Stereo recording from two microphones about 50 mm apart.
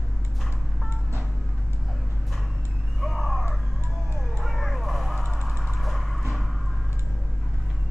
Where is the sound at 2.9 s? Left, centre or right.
Centre.